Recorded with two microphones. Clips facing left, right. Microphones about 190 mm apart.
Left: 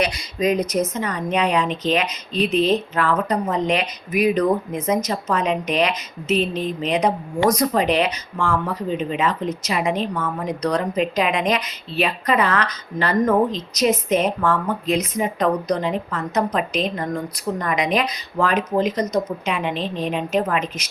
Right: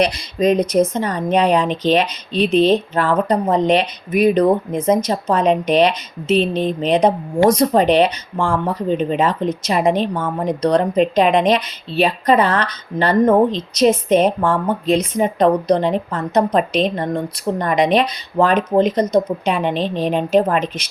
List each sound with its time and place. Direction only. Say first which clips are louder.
0.0 s a woman's voice: right 5 dB; 30° right (ahead or behind)